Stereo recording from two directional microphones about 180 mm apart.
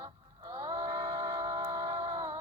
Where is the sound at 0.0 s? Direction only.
20° right (ahead or behind).